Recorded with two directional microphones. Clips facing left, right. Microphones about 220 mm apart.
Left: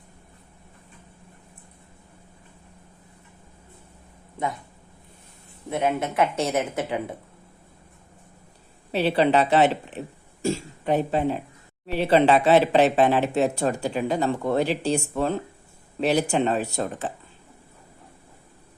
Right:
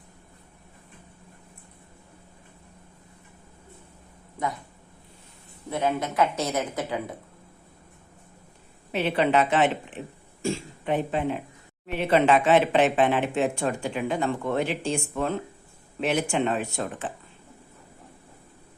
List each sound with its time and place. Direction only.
5.7 s a woman's voice: 25° left (ahead or behind)
8.9 s speech: 35° left (ahead or behind)